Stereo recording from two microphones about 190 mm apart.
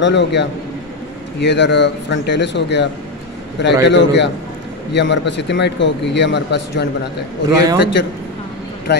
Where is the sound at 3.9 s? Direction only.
70° left (ahead or behind).